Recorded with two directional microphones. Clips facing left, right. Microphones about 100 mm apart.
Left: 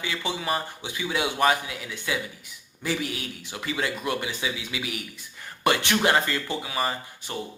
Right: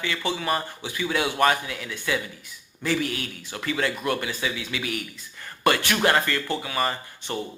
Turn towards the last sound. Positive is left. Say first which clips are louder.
# right 2 dB
turn(degrees=10)  # may be behind; listen again after turning